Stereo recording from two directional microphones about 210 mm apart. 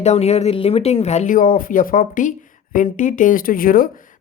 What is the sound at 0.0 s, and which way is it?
Speech, 30° left (ahead or behind).